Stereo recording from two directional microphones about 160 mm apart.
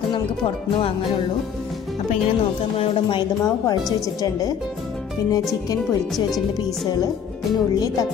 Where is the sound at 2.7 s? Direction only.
40° left (ahead or behind).